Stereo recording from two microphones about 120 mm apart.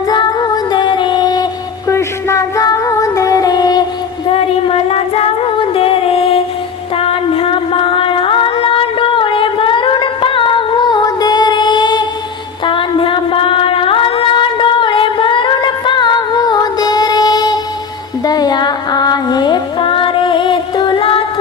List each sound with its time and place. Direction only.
0.1 s music: 35° left (ahead or behind)
1.9 s music: 25° left (ahead or behind)
4.3 s music: 55° left (ahead or behind); by 12.0 s 35° left (ahead or behind)
12.6 s singing: 45° left (ahead or behind)
18.3 s music: 35° left (ahead or behind)